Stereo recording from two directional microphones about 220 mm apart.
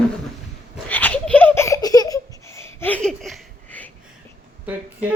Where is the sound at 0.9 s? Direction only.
10° left (ahead or behind).